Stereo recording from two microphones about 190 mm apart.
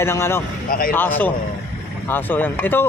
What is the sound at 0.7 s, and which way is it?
Speech, 50° left (ahead or behind).